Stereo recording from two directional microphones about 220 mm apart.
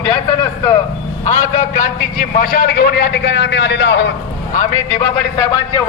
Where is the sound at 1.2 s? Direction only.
30° left (ahead or behind); by 4.1 s 55° left (ahead or behind).